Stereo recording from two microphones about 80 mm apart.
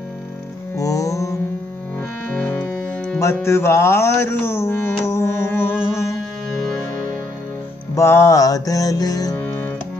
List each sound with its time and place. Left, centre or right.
0.7 s music: left
2.0 s music: left
3.4 s mantra: left
7.9 s music: left